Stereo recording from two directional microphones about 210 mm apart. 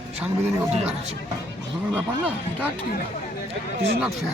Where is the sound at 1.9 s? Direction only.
5° right (ahead or behind).